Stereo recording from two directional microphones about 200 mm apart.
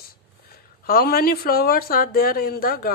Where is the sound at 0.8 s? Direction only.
50° left (ahead or behind).